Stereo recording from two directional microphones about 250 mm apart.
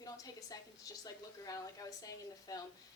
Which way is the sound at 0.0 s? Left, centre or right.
Centre.